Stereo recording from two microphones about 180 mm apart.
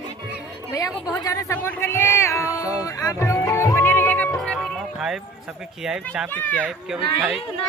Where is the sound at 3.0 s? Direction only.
15° left (ahead or behind).